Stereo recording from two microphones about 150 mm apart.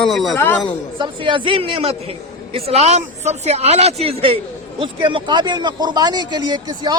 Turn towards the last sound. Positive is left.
turn(degrees=-25)  # may be behind; listen again after turning